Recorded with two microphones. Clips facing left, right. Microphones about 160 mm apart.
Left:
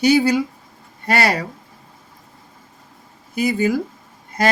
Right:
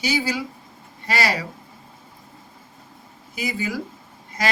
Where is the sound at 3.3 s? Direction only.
55° left (ahead or behind).